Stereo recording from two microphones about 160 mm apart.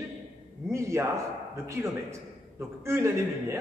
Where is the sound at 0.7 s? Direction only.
20° right (ahead or behind).